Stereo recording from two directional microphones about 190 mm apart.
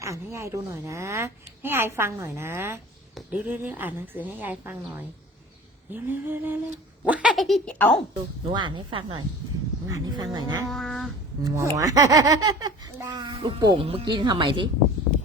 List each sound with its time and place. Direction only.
0.0 s a woman's voice: 15° right (ahead or behind); by 8.0 s 5° left (ahead or behind)
8.1 s a child's voice: 25° right (ahead or behind)
10.7 s a sound: centre (ahead or behind)
11.4 s a woman's voice: 15° right (ahead or behind)